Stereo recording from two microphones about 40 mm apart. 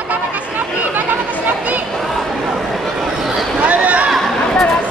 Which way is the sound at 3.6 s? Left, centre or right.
Right.